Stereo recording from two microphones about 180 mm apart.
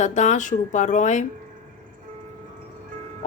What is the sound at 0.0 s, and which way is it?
Speech, 40° left (ahead or behind).